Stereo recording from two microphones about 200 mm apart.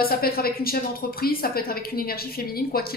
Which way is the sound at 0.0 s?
50° left (ahead or behind).